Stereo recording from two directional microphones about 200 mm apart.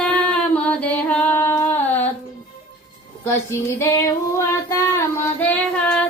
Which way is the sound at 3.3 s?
15° left (ahead or behind).